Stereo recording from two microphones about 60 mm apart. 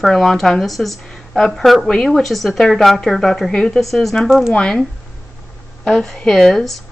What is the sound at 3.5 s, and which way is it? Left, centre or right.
Speech, centre.